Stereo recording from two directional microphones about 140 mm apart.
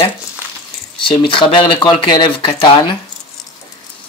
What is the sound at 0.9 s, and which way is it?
Speech, 35° left (ahead or behind).